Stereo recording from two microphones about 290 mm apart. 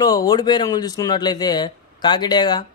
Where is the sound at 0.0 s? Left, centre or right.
Centre.